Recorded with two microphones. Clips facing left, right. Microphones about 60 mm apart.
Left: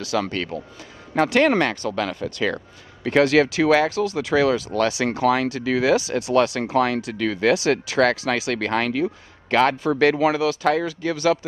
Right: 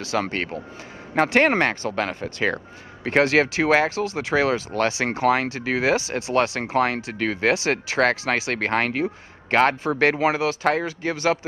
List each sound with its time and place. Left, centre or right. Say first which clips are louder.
0.0 s speech: left 1 dB; right